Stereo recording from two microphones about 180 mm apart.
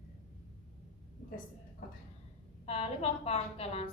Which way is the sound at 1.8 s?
55° left (ahead or behind).